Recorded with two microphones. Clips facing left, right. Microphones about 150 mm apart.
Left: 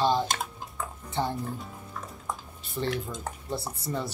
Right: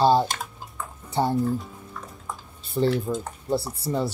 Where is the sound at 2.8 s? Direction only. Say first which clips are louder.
Right 8 dB; 35° right (ahead or behind).